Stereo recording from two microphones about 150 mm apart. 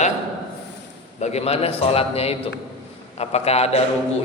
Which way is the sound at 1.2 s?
45° left (ahead or behind).